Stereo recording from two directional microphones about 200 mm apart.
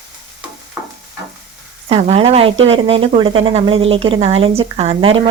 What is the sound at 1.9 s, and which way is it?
A woman's voice, 30° right (ahead or behind).